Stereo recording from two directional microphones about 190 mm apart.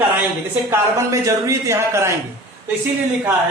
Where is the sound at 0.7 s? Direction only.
15° right (ahead or behind).